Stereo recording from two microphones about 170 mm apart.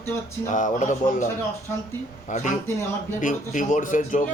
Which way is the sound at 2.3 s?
45° left (ahead or behind).